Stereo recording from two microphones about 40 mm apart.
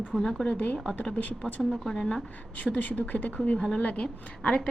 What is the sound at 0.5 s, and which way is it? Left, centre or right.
Speech, left.